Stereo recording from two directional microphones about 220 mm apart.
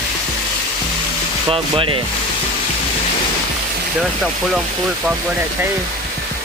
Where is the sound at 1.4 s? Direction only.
25° right (ahead or behind).